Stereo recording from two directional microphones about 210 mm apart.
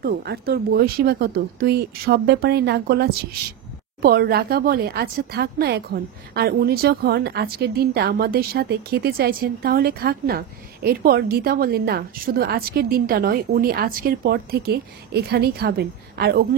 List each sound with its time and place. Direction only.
0.0 s speech: 50° right (ahead or behind)